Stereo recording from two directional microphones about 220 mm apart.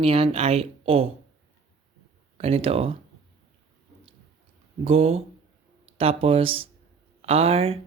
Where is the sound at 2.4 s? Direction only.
25° right (ahead or behind).